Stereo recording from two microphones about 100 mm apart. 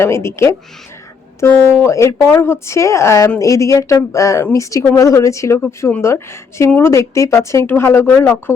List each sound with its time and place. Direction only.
0.0 s a woman's voice: 25° left (ahead or behind)